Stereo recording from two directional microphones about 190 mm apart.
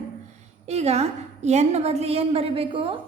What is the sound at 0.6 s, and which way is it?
A woman's voice, 35° right (ahead or behind).